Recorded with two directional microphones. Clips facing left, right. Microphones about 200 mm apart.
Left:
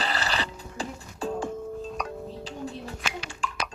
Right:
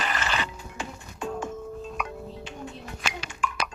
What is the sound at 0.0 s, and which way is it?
Music, 35° left (ahead or behind).